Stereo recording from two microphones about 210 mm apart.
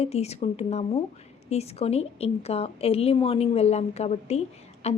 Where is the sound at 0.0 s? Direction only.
30° left (ahead or behind).